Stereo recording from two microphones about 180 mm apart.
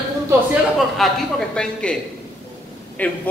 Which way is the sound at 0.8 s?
Centre (ahead or behind).